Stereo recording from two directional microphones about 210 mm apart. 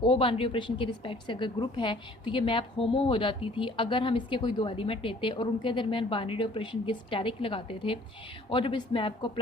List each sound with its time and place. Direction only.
0.0 s a woman's voice: 25° left (ahead or behind)